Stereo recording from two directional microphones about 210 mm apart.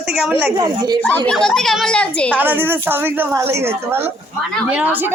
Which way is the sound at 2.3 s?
10° right (ahead or behind).